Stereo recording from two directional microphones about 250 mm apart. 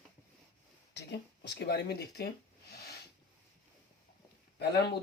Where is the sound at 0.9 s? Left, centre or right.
Left.